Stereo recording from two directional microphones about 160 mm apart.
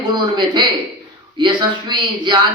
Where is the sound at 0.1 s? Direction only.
30° right (ahead or behind).